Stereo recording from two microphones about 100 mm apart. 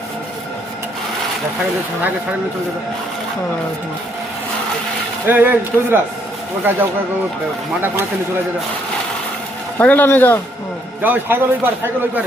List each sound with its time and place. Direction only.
5.2 s a man's voice: 20° right (ahead or behind)
9.7 s speech: 15° left (ahead or behind)
11.0 s a man's voice: 20° right (ahead or behind)